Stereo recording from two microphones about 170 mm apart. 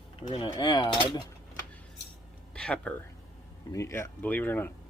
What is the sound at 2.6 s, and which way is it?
Speech, 5° left (ahead or behind).